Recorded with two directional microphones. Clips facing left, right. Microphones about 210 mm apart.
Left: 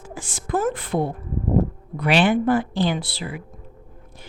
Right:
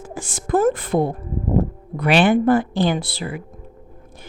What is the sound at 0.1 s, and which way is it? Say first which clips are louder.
Speech: right 5 dB; 45° right (ahead or behind).